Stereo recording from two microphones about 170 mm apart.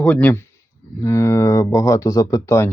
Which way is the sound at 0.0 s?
10° left (ahead or behind).